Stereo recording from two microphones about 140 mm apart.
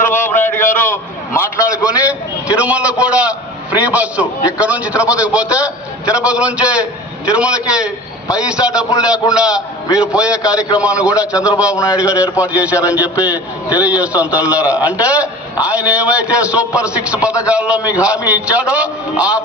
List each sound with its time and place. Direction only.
0.0 s a man's voice: 15° left (ahead or behind)
1.8 s a man's voice: 10° right (ahead or behind)